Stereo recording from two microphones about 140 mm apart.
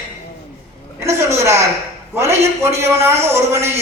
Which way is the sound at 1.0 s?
20° right (ahead or behind).